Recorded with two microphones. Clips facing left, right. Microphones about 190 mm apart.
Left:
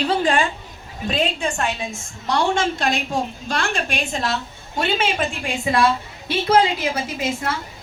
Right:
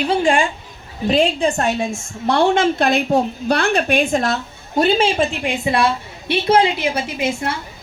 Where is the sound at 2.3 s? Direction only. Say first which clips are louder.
Right 5 dB; 55° right (ahead or behind); by 5.2 s 35° right (ahead or behind).